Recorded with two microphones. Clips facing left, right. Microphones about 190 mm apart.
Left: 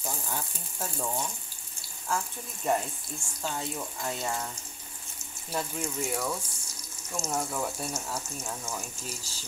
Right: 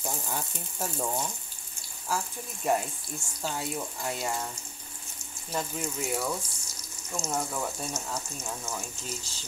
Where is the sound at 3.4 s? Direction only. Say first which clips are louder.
Right 1 dB; 5° right (ahead or behind).